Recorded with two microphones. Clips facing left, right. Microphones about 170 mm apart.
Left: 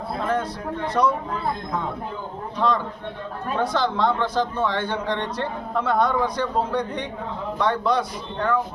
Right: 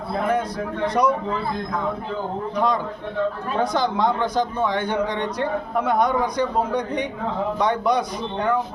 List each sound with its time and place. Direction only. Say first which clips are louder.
0.2 s a sound: right 3 dB; 15° right (ahead or behind)
1.0 s a man's voice: right 1 dB; 10° right (ahead or behind)
2.6 s a man's voice: even; 15° right (ahead or behind)